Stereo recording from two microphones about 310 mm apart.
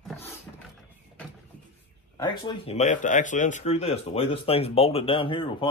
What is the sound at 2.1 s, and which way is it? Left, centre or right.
Speech, centre.